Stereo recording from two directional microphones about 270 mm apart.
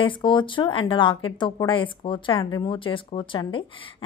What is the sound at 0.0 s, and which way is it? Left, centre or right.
Speech, centre.